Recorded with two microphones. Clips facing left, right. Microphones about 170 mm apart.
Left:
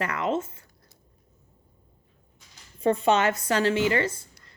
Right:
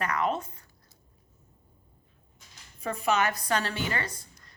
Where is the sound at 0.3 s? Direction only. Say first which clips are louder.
Left 8 dB; 25° left (ahead or behind).